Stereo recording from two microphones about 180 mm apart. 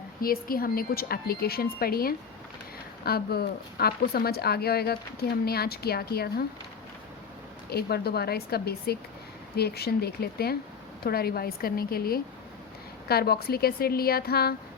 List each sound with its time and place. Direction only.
0.2 s speech: 55° left (ahead or behind)
7.7 s speech: 60° left (ahead or behind)